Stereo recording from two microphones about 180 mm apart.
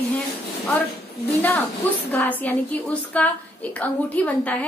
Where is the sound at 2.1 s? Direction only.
10° left (ahead or behind).